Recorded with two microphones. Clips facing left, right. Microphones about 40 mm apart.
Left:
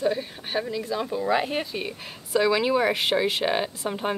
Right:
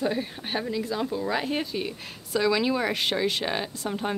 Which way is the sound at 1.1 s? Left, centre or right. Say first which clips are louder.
Left 3 dB; centre.